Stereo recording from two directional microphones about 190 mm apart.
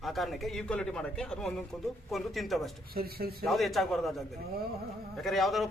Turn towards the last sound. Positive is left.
turn(degrees=0)  # may be behind; listen again after turning